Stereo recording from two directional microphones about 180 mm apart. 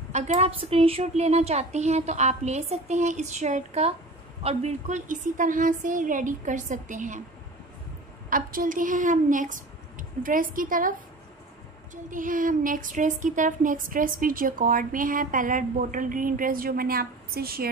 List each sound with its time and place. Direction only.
0.1 s a woman's voice: 35° right (ahead or behind)
8.3 s speech: 50° right (ahead or behind)